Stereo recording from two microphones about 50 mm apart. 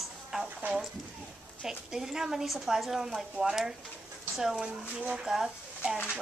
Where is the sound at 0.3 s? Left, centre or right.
Centre.